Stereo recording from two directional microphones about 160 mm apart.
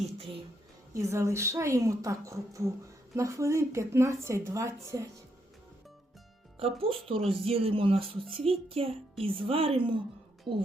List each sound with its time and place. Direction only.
0.9 s a woman's voice: 20° right (ahead or behind)
6.6 s speech: 35° right (ahead or behind)